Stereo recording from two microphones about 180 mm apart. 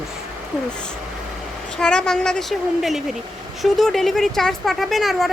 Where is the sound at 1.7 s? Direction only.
5° left (ahead or behind).